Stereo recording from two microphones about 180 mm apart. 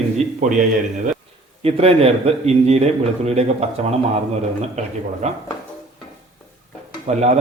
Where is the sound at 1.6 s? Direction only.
35° right (ahead or behind).